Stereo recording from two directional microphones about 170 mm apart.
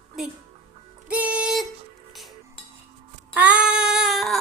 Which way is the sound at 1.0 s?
10° right (ahead or behind).